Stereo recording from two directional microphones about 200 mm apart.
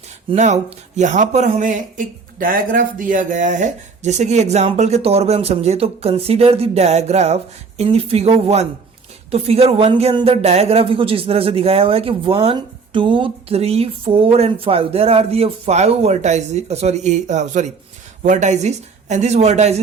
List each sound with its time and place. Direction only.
0.3 s speech: 35° right (ahead or behind)